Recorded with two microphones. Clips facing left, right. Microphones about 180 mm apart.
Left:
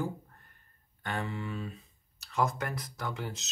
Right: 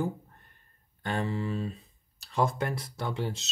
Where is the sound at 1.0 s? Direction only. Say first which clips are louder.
Right 5 dB; 35° right (ahead or behind).